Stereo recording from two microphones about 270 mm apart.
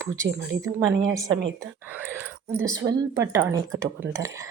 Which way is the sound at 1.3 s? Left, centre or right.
Right.